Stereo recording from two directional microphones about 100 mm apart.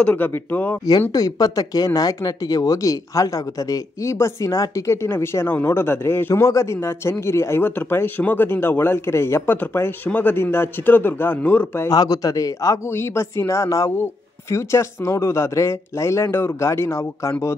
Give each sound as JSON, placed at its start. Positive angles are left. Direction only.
{"t": 0.0, "sound": "speech", "side_deg": 15}
{"t": 1.1, "sound": "speech", "side_deg": 40}
{"t": 11.9, "sound": "speech", "side_deg": 40}